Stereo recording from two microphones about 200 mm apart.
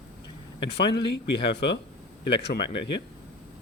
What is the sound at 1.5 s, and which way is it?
Speech, 60° left (ahead or behind).